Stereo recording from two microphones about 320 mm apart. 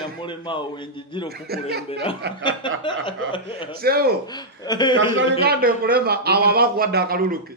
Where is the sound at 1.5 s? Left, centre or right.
Right.